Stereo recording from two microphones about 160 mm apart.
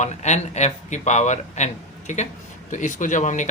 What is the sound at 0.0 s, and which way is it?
Speech, 45° left (ahead or behind).